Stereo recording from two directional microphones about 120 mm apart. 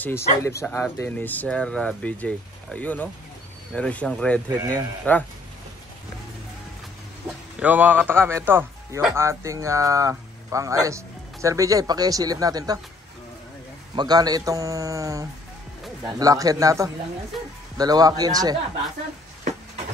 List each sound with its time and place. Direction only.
0.0 s speech: 20° left (ahead or behind)
7.5 s a man's voice: 15° right (ahead or behind); by 12.8 s 30° right (ahead or behind)
13.9 s a man's voice: 35° right (ahead or behind)